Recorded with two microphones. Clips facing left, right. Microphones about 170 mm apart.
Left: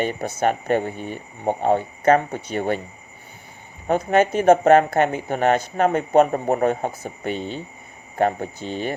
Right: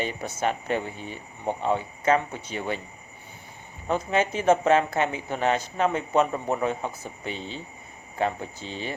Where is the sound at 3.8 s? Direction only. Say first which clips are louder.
Left 6 dB; 55° left (ahead or behind).